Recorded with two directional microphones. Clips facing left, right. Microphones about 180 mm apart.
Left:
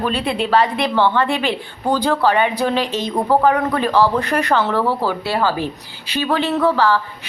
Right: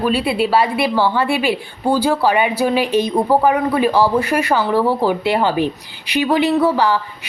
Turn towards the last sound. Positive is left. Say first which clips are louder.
# right 1 dB
turn(degrees=-15)  # may be behind; listen again after turning